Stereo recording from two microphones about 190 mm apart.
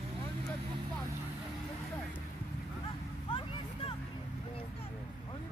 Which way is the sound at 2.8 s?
30° left (ahead or behind).